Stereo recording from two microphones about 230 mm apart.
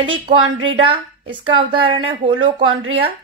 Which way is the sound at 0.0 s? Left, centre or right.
Right.